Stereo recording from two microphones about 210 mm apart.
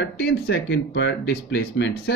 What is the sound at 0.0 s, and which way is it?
Speech, 55° left (ahead or behind).